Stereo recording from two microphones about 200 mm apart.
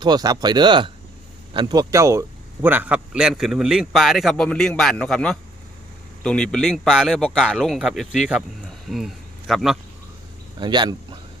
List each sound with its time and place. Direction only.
0.0 s a man's voice: 20° right (ahead or behind); by 9.7 s centre (ahead or behind)
10.6 s speech: 20° right (ahead or behind)